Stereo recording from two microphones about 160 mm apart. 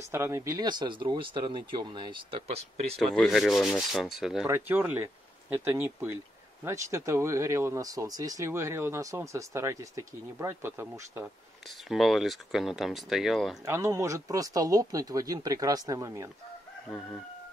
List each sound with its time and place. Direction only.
0.1 s speech: 15° right (ahead or behind); by 3.0 s 35° right (ahead or behind)
3.0 s speech: centre (ahead or behind)
4.5 s speech: 15° right (ahead or behind)
11.9 s speech: centre (ahead or behind)
13.7 s speech: 20° right (ahead or behind)